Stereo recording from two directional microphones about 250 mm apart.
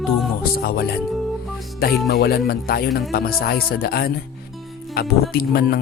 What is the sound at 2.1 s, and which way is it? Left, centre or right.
Speech, left.